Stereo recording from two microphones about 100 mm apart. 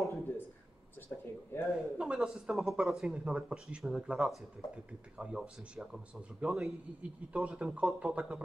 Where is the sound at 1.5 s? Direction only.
25° left (ahead or behind).